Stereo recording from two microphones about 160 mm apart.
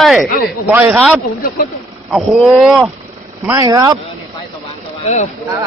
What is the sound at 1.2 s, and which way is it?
Speech, 60° left (ahead or behind).